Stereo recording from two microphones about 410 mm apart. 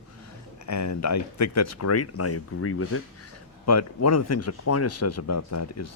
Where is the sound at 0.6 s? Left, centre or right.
Left.